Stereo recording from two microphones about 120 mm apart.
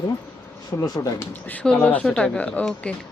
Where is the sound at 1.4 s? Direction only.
10° left (ahead or behind).